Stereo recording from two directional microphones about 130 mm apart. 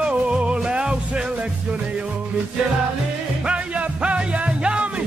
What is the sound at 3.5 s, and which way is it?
Music, 10° right (ahead or behind).